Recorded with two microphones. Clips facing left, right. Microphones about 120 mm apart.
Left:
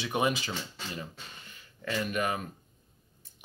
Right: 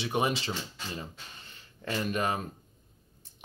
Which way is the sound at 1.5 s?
30° right (ahead or behind).